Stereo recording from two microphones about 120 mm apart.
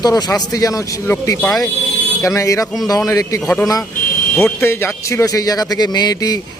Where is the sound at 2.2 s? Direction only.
25° left (ahead or behind).